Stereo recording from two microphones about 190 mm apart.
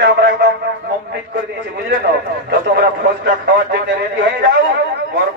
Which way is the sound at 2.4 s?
55° right (ahead or behind).